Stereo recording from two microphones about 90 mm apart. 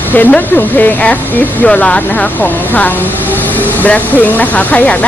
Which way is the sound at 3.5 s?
15° left (ahead or behind).